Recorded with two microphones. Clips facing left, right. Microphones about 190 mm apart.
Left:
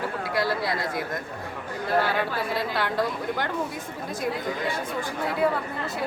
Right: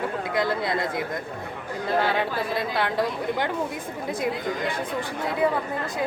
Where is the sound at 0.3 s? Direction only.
20° right (ahead or behind).